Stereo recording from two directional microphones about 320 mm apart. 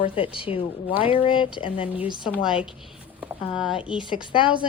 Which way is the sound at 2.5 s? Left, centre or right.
Centre.